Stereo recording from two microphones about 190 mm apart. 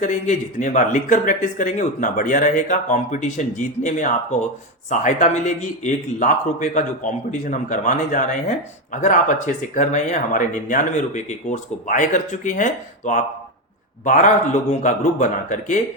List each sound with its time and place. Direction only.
0.0 s a man's voice: 40° left (ahead or behind)